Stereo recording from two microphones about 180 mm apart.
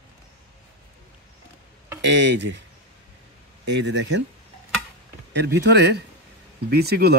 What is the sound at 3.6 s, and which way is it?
Speech, 75° right (ahead or behind).